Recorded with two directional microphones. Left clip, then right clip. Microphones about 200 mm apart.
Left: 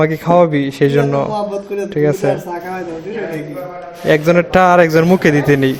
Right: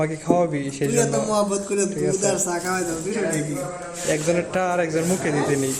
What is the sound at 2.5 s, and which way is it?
Speech, 35° right (ahead or behind).